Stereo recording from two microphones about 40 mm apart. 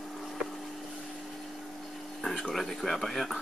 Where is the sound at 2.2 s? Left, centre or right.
Centre.